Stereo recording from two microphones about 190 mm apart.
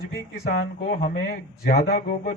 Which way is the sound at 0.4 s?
50° left (ahead or behind).